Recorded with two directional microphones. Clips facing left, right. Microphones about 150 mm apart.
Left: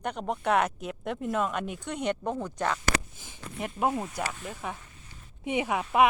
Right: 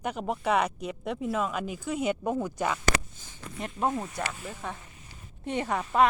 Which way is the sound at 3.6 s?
5° left (ahead or behind).